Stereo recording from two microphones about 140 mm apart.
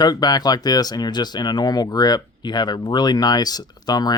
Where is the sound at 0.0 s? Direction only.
30° left (ahead or behind).